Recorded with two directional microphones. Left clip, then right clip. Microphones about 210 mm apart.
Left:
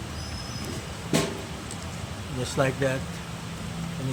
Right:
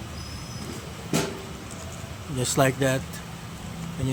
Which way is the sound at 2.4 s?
50° right (ahead or behind).